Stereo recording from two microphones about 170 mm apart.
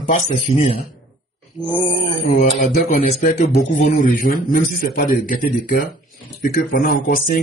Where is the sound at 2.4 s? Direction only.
45° left (ahead or behind).